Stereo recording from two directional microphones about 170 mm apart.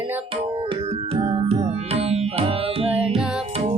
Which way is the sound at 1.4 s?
40° right (ahead or behind).